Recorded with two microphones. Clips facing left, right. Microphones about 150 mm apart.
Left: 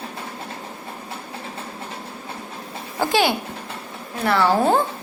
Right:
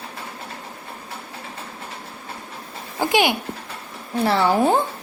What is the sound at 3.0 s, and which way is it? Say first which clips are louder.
Speech: even; 15° right (ahead or behind).